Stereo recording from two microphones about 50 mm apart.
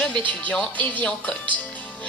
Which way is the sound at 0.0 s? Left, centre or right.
Left.